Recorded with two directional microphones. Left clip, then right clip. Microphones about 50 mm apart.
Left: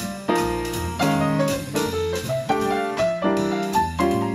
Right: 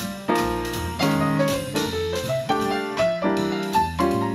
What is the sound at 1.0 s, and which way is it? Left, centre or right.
Music, right.